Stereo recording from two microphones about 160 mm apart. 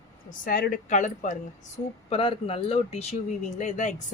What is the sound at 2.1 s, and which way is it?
Speech, 35° left (ahead or behind).